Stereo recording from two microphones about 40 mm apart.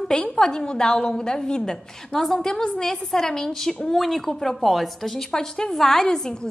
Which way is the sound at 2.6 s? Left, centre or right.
Left.